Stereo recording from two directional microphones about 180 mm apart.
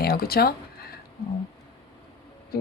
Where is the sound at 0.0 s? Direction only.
60° left (ahead or behind).